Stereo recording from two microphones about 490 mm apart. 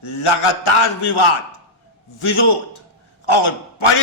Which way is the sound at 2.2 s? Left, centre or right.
Left.